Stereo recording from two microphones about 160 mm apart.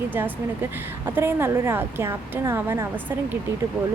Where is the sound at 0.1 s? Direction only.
10° right (ahead or behind).